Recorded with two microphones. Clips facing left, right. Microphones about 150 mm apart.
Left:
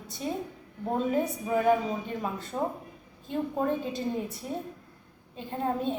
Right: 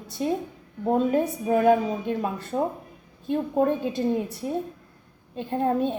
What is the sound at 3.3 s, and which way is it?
A woman's voice, 65° right (ahead or behind).